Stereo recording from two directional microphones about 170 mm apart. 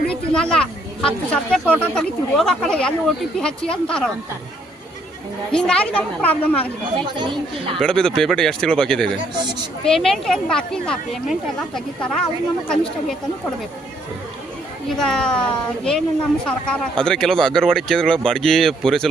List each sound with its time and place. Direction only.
0.1 s speech: 5° left (ahead or behind)
5.5 s a woman's voice: 5° left (ahead or behind)
7.2 s speech: 30° right (ahead or behind)
7.8 s speech: 5° left (ahead or behind)
14.8 s speech: 5° left (ahead or behind)